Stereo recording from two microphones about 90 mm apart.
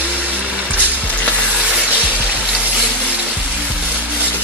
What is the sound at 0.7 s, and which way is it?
Music, 15° left (ahead or behind).